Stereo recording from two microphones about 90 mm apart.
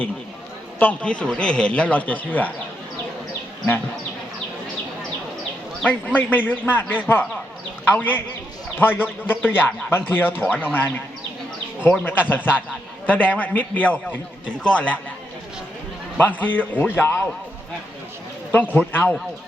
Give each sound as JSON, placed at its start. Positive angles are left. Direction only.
{"t": 0.8, "sound": "a man's voice", "side_deg": 15}
{"t": 5.8, "sound": "a man's voice", "side_deg": 15}
{"t": 16.1, "sound": "a man's voice", "side_deg": 20}
{"t": 18.7, "sound": "a man's voice", "side_deg": 20}